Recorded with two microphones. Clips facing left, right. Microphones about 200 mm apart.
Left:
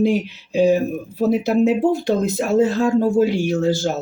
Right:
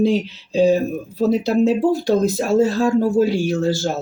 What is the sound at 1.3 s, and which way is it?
Speech, 20° left (ahead or behind).